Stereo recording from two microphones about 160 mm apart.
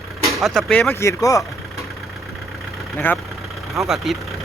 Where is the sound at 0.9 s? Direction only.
20° left (ahead or behind).